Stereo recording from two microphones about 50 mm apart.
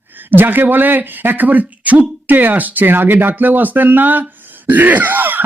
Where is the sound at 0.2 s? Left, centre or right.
Right.